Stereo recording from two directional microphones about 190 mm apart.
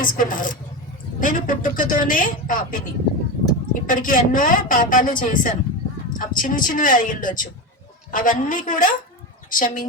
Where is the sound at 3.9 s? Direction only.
45° left (ahead or behind).